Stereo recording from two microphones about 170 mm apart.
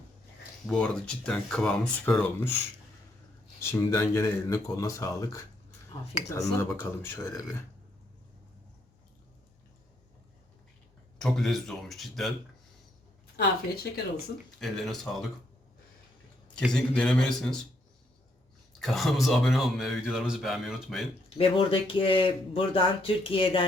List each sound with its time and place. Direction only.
0.7 s speech: 5° left (ahead or behind)
3.6 s speech: 15° left (ahead or behind)
11.2 s speech: centre (ahead or behind)
14.6 s speech: centre (ahead or behind)
16.6 s speech: 5° left (ahead or behind)
18.8 s speech: centre (ahead or behind)
21.2 s speech: 35° left (ahead or behind)